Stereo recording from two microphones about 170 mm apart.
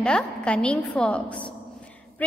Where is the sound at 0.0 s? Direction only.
5° left (ahead or behind).